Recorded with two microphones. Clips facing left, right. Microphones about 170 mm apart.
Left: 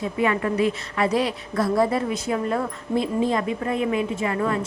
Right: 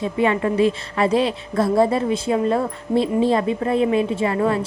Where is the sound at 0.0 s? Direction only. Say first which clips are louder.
Right 3 dB; 25° right (ahead or behind).